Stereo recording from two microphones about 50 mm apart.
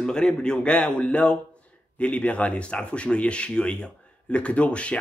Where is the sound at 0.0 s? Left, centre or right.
Centre.